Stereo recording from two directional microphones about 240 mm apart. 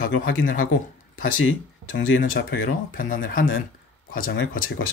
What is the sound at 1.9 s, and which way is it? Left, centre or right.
Speech, left.